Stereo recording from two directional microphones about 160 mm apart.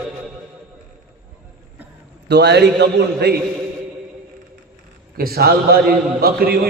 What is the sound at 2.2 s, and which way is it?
A man's voice, 90° right.